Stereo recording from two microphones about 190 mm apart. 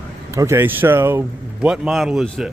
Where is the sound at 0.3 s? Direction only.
15° right (ahead or behind).